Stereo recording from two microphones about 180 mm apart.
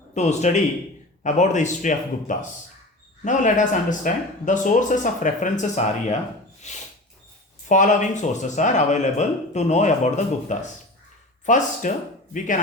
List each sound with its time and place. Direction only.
0.1 s speech: 40° left (ahead or behind)
6.6 s a sound: 40° left (ahead or behind)
7.7 s speech: 45° left (ahead or behind)